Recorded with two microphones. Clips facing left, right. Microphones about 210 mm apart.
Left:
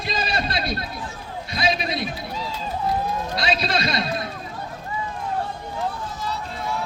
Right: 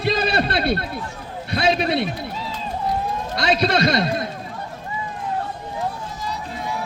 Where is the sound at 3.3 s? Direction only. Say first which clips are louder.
Right 7 dB; 55° right (ahead or behind).